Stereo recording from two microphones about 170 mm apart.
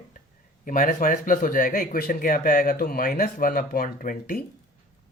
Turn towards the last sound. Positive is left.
turn(degrees=55)  # may be behind; listen again after turning